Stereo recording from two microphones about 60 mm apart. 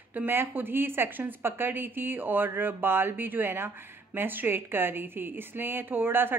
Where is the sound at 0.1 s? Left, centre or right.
Right.